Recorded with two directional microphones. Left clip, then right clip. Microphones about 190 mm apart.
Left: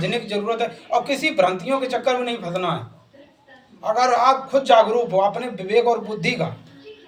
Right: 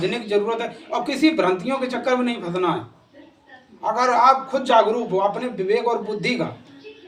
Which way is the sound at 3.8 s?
20° right (ahead or behind).